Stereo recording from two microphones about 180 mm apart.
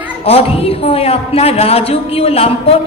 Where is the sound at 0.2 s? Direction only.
35° left (ahead or behind).